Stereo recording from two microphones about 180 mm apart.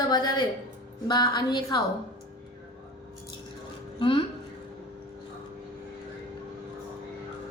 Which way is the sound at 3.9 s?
30° left (ahead or behind).